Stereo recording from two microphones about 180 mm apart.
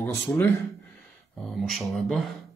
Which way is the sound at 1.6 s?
Centre (ahead or behind).